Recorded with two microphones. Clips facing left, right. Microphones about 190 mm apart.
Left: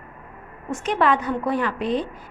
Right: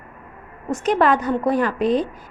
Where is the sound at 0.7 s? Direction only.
40° right (ahead or behind).